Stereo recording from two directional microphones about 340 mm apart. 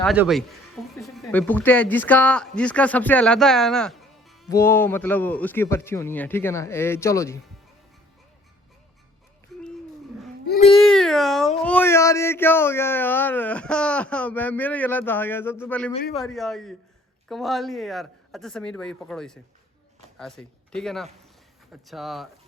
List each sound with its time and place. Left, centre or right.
0.0 s speech: centre
10.4 s baby cry: left
10.7 s speech: centre